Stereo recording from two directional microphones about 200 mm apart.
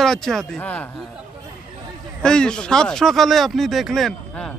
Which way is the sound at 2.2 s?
5° left (ahead or behind).